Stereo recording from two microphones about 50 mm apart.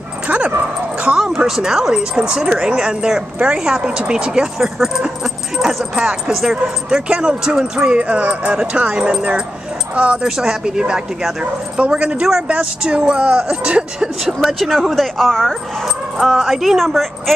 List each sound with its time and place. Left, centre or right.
1.2 s speech: centre
8.0 s speech: right
10.2 s speech: centre
14.2 s speech: centre
16.2 s a woman's voice: centre